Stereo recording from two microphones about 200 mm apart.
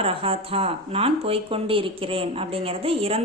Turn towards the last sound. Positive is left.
turn(degrees=-30)  # may be behind; listen again after turning